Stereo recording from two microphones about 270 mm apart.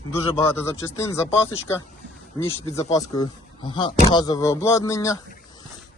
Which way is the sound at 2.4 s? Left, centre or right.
Centre.